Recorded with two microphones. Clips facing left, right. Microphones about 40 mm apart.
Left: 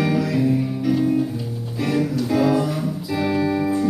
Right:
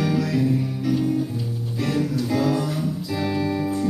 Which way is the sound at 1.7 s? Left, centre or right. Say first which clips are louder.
Left 3 dB; centre.